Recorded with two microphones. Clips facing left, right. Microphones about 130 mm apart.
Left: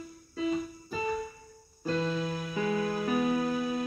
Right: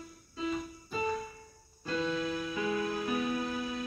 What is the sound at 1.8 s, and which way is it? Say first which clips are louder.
Music: left 2 dB; 40° left (ahead or behind).